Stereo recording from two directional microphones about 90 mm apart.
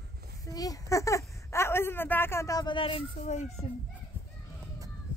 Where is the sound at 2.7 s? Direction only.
75° left (ahead or behind).